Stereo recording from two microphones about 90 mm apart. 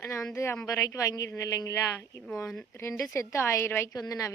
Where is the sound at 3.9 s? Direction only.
45° left (ahead or behind).